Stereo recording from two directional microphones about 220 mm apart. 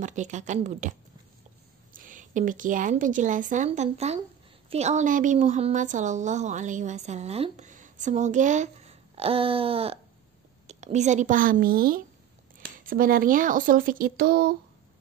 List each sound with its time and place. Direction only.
0.0 s a woman's voice: 35° right (ahead or behind)
2.0 s a woman's voice: 35° right (ahead or behind)